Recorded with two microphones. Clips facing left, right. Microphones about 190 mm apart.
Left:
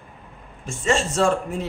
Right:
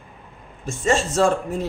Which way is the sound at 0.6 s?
40° right (ahead or behind).